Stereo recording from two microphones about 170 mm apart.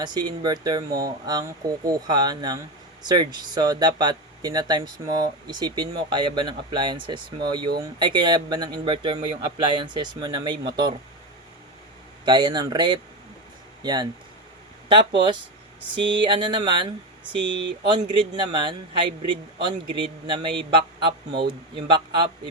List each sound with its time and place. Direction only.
0.0 s a man's voice: 25° right (ahead or behind)
12.2 s a man's voice: 25° right (ahead or behind)